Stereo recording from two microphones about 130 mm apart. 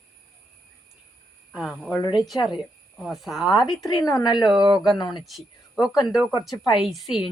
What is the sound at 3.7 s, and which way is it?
A woman's voice, 30° left (ahead or behind).